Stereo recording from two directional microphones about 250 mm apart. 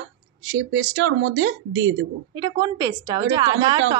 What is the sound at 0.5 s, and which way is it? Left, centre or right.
Speech, right.